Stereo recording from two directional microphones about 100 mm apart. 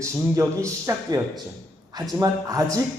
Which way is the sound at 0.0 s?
30° right (ahead or behind).